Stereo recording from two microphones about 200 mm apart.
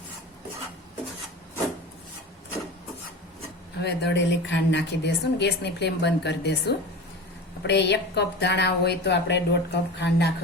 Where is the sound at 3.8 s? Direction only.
60° left (ahead or behind).